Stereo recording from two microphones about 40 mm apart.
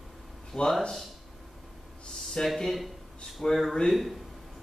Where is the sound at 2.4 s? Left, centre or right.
Centre.